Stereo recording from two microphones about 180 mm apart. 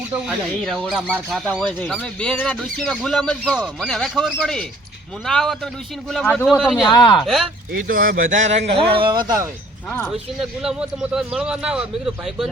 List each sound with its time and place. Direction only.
0.1 s speech: 5° right (ahead or behind)
6.6 s speech: centre (ahead or behind)
6.9 s speech: 25° left (ahead or behind)
7.7 s speech: 50° right (ahead or behind)
8.9 s speech: 30° right (ahead or behind)
10.6 s speech: 5° right (ahead or behind)